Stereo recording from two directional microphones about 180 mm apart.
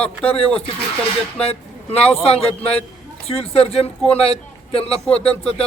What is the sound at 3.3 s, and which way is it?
Speech, 35° left (ahead or behind).